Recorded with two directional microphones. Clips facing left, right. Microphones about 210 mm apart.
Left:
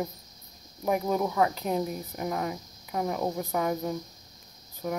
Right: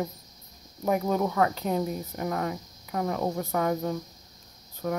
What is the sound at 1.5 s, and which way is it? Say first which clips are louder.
Speech: right 1 dB; 5° left (ahead or behind).